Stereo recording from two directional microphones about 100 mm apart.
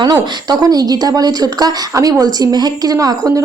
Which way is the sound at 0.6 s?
40° right (ahead or behind).